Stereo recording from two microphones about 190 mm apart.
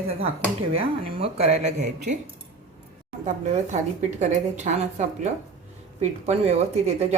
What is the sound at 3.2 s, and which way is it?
Speech, 40° right (ahead or behind).